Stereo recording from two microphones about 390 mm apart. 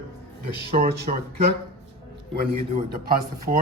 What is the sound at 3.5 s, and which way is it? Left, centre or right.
Speech, right.